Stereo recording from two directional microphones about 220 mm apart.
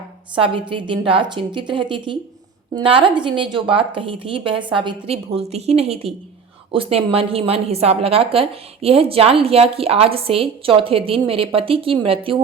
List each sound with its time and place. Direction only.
0.3 s a woman's voice: 25° right (ahead or behind)